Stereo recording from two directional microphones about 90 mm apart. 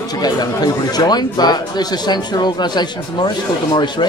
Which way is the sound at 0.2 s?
45° left (ahead or behind).